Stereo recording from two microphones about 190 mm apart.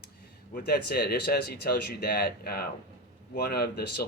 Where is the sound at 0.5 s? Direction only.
55° left (ahead or behind).